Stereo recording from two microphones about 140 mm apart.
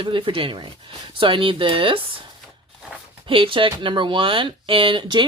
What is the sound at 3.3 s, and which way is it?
Speech, 40° right (ahead or behind).